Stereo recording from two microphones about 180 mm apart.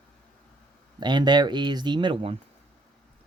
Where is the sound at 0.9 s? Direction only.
25° right (ahead or behind).